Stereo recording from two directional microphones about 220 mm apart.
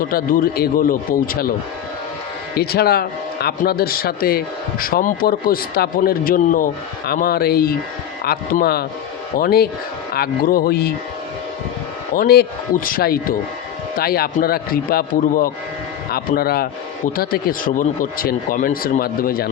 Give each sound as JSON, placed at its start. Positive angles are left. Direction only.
{"t": 0.0, "sound": "speech", "side_deg": 40}
{"t": 2.6, "sound": "speech", "side_deg": 45}
{"t": 12.1, "sound": "speech", "side_deg": 45}